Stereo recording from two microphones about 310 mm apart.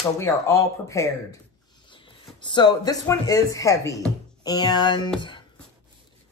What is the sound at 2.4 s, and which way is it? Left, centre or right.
Speech, centre.